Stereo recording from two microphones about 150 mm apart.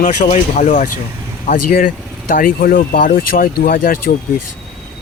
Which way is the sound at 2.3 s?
70° left (ahead or behind).